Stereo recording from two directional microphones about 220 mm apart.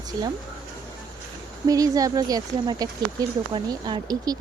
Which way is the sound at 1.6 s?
15° right (ahead or behind).